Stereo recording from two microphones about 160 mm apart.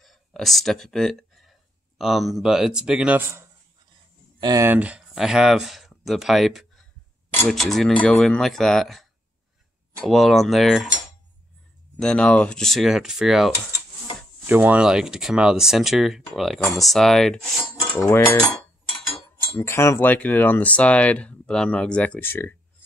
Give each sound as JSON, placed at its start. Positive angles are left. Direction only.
{"t": 0.0, "sound": "speech", "side_deg": 0}
{"t": 4.4, "sound": "speech", "side_deg": -25}
{"t": 4.6, "sound": "speech", "side_deg": -10}
{"t": 10.0, "sound": "speech", "side_deg": 0}
{"t": 12.0, "sound": "speech", "side_deg": 5}
{"t": 17.9, "sound": "speech", "side_deg": 15}
{"t": 19.6, "sound": "speech", "side_deg": 15}